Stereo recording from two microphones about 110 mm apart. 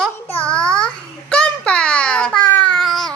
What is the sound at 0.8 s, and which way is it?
Babbling, 5° left (ahead or behind).